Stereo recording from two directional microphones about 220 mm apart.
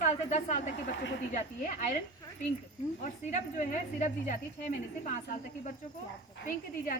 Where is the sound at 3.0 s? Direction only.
35° left (ahead or behind).